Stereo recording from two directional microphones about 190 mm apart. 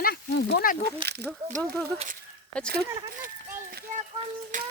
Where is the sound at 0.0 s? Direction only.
60° left (ahead or behind).